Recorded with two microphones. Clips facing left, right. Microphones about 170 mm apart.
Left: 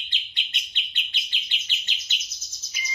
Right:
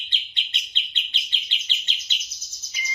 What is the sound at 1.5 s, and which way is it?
Chirp, 25° right (ahead or behind).